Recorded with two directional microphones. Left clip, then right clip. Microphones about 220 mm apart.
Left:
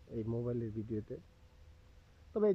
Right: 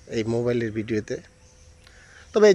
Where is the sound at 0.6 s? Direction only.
25° right (ahead or behind).